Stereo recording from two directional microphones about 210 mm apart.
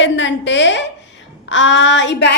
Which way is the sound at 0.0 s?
60° left (ahead or behind).